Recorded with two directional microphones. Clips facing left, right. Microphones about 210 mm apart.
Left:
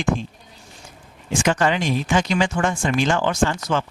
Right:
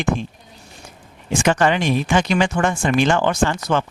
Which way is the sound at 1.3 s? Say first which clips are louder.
Right 2 dB; 60° right (ahead or behind).